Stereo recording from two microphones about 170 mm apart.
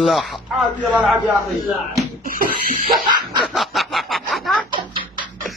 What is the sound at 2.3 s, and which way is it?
Speech, 55° right (ahead or behind).